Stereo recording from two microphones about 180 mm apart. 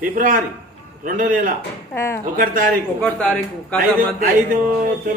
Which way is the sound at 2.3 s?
50° right (ahead or behind).